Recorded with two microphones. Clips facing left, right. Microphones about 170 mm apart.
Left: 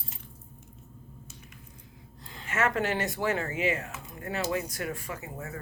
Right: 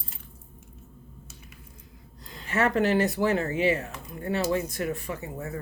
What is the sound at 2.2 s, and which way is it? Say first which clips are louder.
Speech: right 3 dB; 35° right (ahead or behind).